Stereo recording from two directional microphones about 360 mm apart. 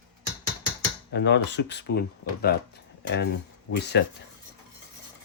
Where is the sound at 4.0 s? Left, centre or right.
Left.